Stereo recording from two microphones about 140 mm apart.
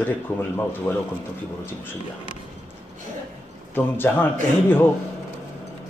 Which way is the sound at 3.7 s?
15° left (ahead or behind).